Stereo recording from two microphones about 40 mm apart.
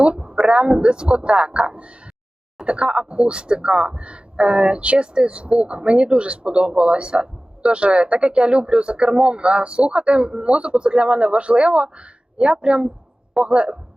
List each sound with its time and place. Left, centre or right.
0.0 s speech: right